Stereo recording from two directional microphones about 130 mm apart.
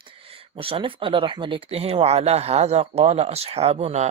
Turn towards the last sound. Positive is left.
turn(degrees=-55)  # may be behind; listen again after turning